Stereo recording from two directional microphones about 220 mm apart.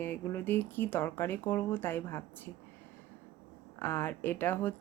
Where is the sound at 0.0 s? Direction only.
10° left (ahead or behind).